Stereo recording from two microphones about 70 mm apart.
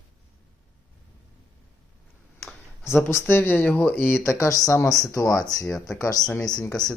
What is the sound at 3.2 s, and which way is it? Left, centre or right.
Speech, left.